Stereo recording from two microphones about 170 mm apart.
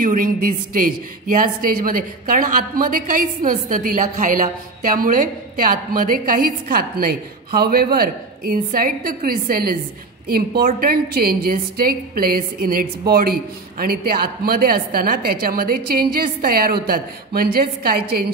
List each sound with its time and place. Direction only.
0.0 s a woman's voice: 55° right (ahead or behind)